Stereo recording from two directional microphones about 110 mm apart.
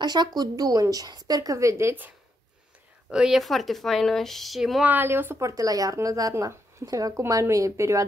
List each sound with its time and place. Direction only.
0.0 s a woman's voice: 40° right (ahead or behind); by 2.1 s 20° right (ahead or behind)
3.1 s speech: 5° right (ahead or behind)
4.8 s speech: 20° right (ahead or behind)
5.5 s a woman's voice: 35° right (ahead or behind)